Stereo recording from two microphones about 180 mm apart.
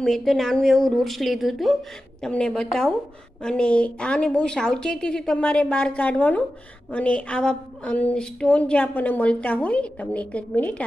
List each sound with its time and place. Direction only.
0.0 s a woman's voice: centre (ahead or behind)